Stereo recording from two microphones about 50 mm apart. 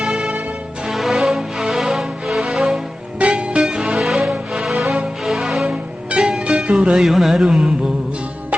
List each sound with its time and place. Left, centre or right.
0.0 s music: centre
0.9 s music: centre
3.2 s music: right
3.6 s music: centre
5.6 s music: centre
6.9 s mantra: centre